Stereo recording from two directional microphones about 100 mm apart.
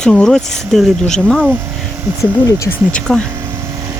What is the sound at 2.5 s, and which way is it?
Speech, 30° left (ahead or behind).